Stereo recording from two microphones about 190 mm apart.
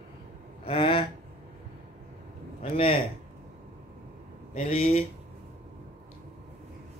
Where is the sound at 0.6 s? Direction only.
25° left (ahead or behind).